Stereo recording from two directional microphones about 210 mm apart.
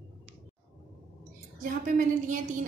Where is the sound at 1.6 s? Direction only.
40° right (ahead or behind).